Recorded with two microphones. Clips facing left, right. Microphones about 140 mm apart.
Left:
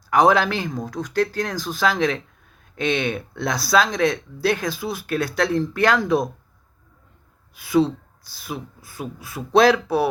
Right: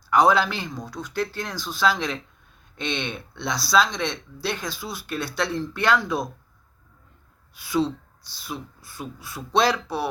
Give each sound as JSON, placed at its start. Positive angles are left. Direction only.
{"t": 0.1, "sound": "speech", "side_deg": 50}
{"t": 7.7, "sound": "speech", "side_deg": 50}
{"t": 9.0, "sound": "speech", "side_deg": 5}
{"t": 9.6, "sound": "speech", "side_deg": 55}